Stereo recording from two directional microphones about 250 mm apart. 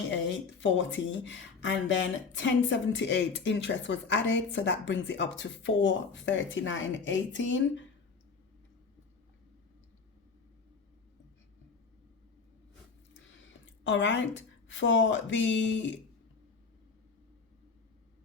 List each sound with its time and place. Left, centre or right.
0.1 s speech: left
13.8 s speech: left